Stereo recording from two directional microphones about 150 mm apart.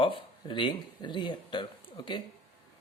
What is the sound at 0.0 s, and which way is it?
Speech, 35° left (ahead or behind).